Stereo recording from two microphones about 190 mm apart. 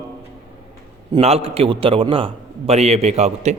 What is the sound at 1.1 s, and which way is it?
A man's voice, 30° right (ahead or behind).